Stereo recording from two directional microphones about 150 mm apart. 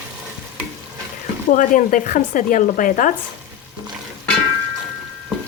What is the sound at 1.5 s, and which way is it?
Speech, 60° left (ahead or behind).